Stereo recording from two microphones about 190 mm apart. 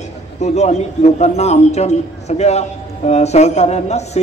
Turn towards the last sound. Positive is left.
turn(degrees=35)  # may be behind; listen again after turning